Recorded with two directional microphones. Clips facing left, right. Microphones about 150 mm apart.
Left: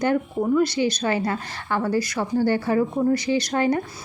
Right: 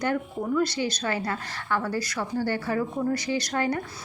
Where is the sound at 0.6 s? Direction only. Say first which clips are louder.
Left 5 dB; 15° left (ahead or behind).